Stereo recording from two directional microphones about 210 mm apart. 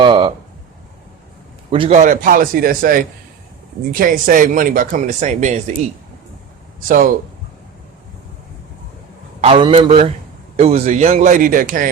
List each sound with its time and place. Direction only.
0.0 s a sound: 20° right (ahead or behind)
1.7 s speech: 25° right (ahead or behind)
6.8 s speech: 40° right (ahead or behind)
9.4 s a man's voice: 25° right (ahead or behind)